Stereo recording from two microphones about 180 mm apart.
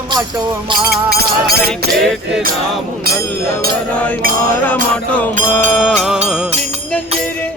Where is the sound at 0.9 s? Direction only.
60° right (ahead or behind).